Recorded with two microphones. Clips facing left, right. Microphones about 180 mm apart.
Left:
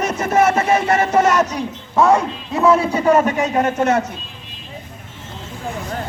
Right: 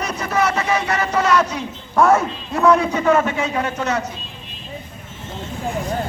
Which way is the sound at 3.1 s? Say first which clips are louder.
Left 3 dB; 40° left (ahead or behind).